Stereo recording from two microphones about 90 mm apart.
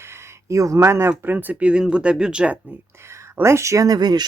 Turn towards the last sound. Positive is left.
turn(degrees=-50)  # may be behind; listen again after turning